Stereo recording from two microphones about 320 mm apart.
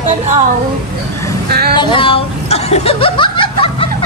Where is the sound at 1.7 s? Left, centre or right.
Centre.